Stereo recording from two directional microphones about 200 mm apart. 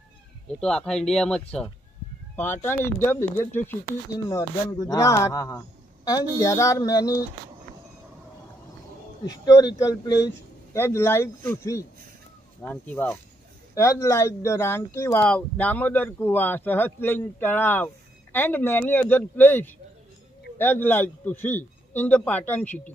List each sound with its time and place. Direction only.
0.6 s speech: 5° left (ahead or behind)
9.2 s speech: 20° left (ahead or behind)